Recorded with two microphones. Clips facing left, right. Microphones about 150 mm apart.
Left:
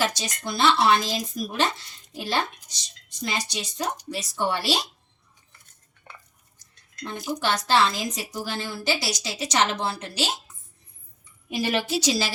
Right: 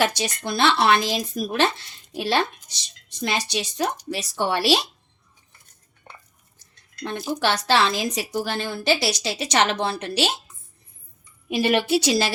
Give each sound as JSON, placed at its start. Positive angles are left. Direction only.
{"t": 0.0, "sound": "a woman's voice", "side_deg": -65}
{"t": 7.0, "sound": "a woman's voice", "side_deg": -75}
{"t": 11.4, "sound": "a woman's voice", "side_deg": -65}